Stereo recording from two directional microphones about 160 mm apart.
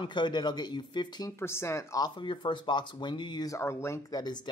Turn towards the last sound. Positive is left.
turn(degrees=25)  # may be behind; listen again after turning